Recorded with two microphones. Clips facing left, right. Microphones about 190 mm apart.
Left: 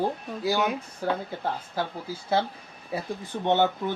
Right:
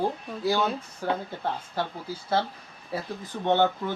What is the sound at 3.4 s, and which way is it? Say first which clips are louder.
Speech: even; 15° left (ahead or behind).